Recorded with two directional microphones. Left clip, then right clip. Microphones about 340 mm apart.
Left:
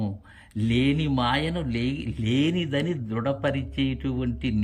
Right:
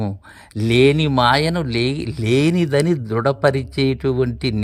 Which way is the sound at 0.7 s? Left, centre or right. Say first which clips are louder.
Right 11 dB; centre.